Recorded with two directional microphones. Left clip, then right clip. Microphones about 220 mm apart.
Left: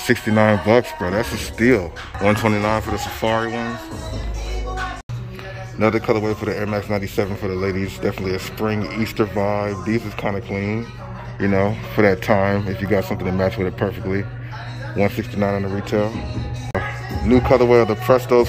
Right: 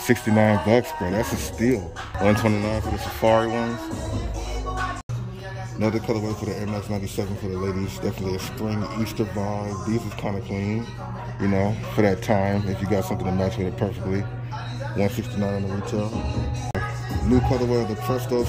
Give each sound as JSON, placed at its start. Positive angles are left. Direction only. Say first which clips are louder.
{"t": 0.0, "sound": "speech", "louder": "left 4 dB", "side_deg": -10}
{"t": 5.8, "sound": "speech", "louder": "left 7 dB", "side_deg": 0}
{"t": 17.3, "sound": "speech", "louder": "left 9 dB", "side_deg": 0}